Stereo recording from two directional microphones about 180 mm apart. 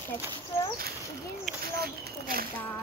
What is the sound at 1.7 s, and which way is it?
Speech, 55° right (ahead or behind).